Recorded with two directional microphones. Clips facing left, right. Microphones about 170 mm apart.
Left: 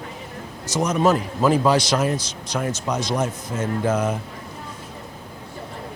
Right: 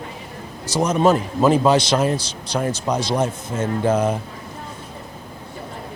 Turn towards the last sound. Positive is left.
turn(degrees=-30)  # may be behind; listen again after turning